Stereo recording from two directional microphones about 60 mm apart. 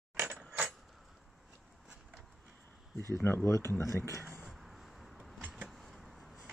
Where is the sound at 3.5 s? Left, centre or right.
Left.